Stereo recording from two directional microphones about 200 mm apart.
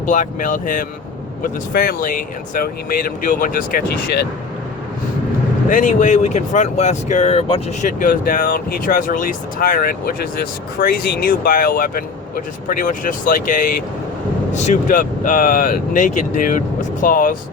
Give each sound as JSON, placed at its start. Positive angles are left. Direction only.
{"t": 0.1, "sound": "speech", "side_deg": 40}
{"t": 5.6, "sound": "speech", "side_deg": 40}